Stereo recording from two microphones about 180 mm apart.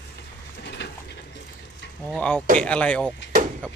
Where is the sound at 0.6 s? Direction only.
70° left (ahead or behind).